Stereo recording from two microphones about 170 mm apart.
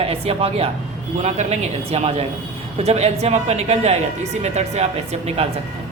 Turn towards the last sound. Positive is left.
turn(degrees=-40)  # may be behind; listen again after turning